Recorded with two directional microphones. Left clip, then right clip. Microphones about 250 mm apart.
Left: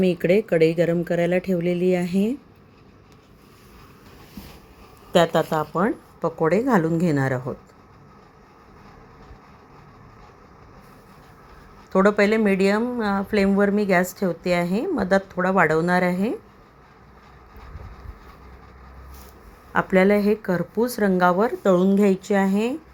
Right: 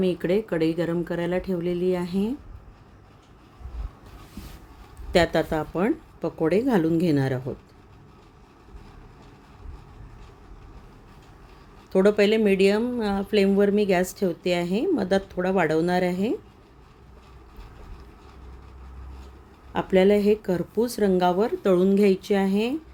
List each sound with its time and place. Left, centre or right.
0.7 s speech: centre
1.1 s speech: right
1.5 s speech: centre
1.9 s speech: right
5.1 s speech: centre
11.9 s speech: centre
19.7 s speech: centre